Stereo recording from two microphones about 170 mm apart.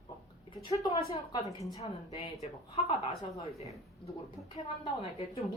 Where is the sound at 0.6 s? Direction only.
35° left (ahead or behind).